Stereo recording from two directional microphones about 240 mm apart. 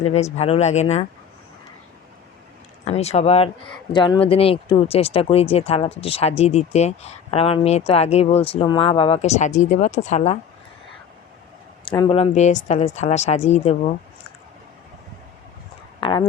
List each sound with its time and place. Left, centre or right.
0.0 s speech: left
2.8 s speech: left
11.9 s speech: left
16.0 s a sound: left